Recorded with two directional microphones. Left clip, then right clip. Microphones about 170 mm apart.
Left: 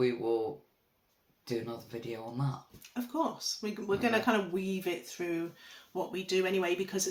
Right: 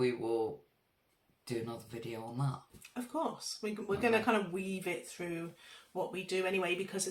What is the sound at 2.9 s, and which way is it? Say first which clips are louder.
Speech: left 3 dB; 15° left (ahead or behind).